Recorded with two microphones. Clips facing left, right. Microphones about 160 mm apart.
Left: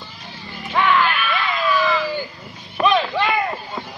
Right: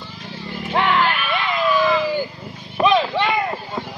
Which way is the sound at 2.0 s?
10° right (ahead or behind).